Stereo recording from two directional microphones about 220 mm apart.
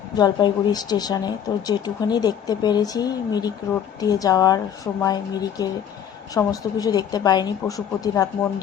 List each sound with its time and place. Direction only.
0.2 s speech: 20° left (ahead or behind)